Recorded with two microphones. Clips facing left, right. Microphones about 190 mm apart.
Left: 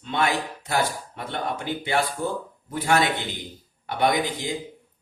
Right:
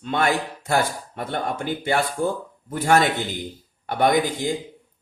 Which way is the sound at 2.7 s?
45° right (ahead or behind).